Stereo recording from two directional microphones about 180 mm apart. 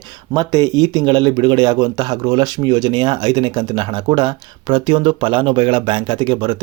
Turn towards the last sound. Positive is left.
turn(degrees=-25)  # may be behind; listen again after turning